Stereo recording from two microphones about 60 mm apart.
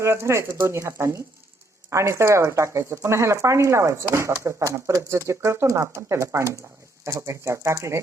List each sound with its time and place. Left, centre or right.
0.0 s speech: right